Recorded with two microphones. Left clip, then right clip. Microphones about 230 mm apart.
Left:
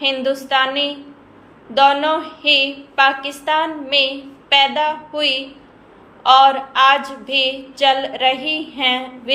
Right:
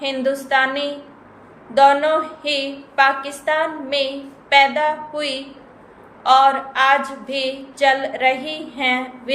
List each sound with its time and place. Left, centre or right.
0.0 s a woman's voice: centre